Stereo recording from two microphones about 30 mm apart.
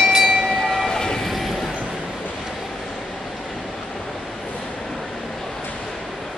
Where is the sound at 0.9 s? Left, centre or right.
Left.